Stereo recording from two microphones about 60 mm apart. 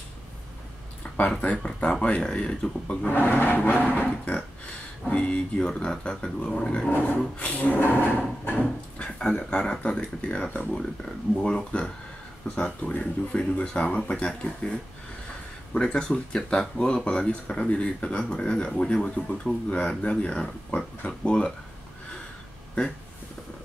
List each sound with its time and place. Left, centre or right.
1.0 s a sound: centre
1.6 s speech: centre
3.1 s speech: left; by 6.9 s centre
6.9 s speech: left